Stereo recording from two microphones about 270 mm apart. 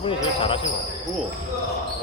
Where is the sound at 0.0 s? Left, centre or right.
Centre.